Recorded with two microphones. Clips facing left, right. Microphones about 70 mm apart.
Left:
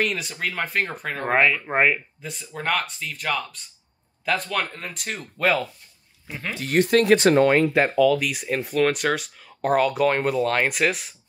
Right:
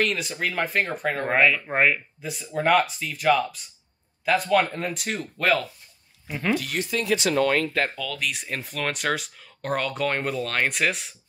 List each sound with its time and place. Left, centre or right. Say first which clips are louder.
0.0 s speech: even; centre
2.2 s speech: right 5 dB; centre
6.6 s speech: left 9 dB; left
7.5 s speech: left 5 dB; centre
8.0 s speech: left 11 dB; centre